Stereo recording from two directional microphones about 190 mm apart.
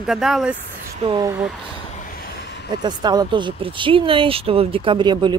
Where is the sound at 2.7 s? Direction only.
20° right (ahead or behind).